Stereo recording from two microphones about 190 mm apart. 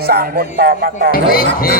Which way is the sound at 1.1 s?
50° left (ahead or behind).